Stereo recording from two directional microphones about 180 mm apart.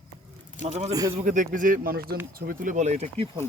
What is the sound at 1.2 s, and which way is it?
Speech, 45° right (ahead or behind).